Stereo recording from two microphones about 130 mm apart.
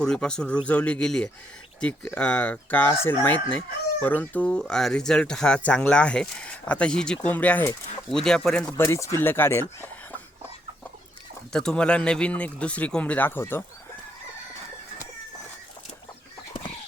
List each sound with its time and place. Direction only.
0.0 s speech: 5° left (ahead or behind)
8.1 s speech: 5° left (ahead or behind)
8.8 s speech: 20° left (ahead or behind)
11.5 s speech: 5° left (ahead or behind)